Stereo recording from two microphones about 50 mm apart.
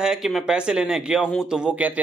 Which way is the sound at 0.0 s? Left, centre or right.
Centre.